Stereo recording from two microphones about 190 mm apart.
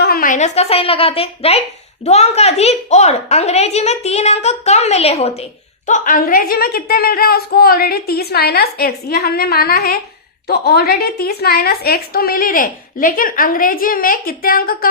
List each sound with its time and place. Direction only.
0.0 s a woman's voice: 50° left (ahead or behind)